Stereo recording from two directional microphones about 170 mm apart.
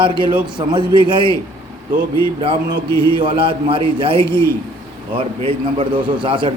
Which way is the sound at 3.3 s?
30° right (ahead or behind).